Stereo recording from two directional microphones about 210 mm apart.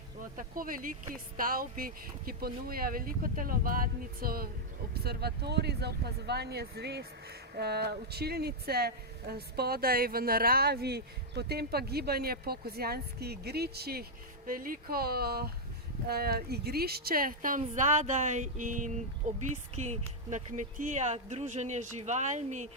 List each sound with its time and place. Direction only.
0.3 s a woman's voice: 40° right (ahead or behind)